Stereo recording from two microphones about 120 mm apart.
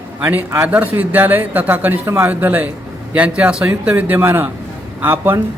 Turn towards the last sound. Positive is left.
turn(degrees=-15)  # may be behind; listen again after turning